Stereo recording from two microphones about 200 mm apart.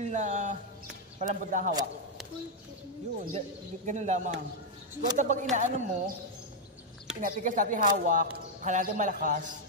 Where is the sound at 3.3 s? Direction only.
35° right (ahead or behind).